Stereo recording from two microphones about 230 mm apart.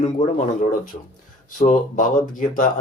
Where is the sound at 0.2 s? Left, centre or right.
Left.